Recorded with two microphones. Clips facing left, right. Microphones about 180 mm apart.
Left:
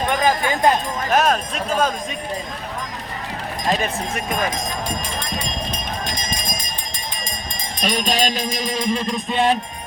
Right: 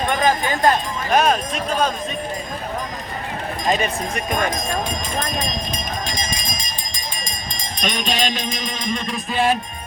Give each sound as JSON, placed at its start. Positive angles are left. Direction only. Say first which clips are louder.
{"t": 0.1, "sound": "speech", "louder": "even", "side_deg": 15}
{"t": 1.1, "sound": "speech", "louder": "right 1 dB", "side_deg": 0}
{"t": 3.7, "sound": "speech", "louder": "right 1 dB", "side_deg": 0}
{"t": 7.9, "sound": "music", "louder": "left 2 dB", "side_deg": 40}